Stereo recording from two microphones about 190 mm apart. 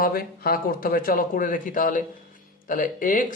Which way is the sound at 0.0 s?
50° left (ahead or behind).